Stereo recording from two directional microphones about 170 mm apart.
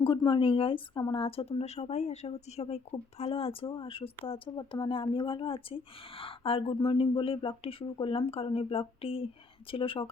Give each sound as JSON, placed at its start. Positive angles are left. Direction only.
{"t": 0.0, "sound": "a woman's voice", "side_deg": 30}